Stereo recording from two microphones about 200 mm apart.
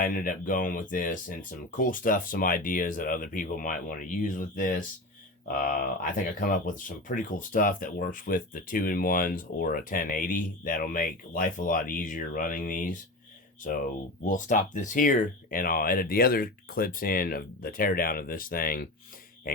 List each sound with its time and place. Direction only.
0.0 s speech: 45° left (ahead or behind)